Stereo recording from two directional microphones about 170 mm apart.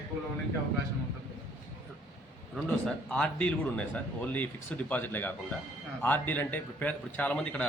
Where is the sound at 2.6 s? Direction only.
5° left (ahead or behind).